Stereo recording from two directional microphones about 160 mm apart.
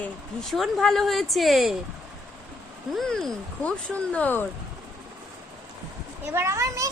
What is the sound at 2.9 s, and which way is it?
A woman's voice, 5° left (ahead or behind).